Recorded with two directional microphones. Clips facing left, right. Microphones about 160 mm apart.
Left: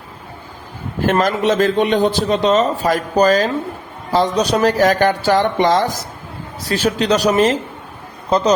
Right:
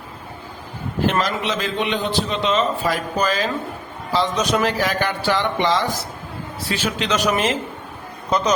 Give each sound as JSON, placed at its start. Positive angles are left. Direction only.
{"t": 1.0, "sound": "a man's voice", "side_deg": 45}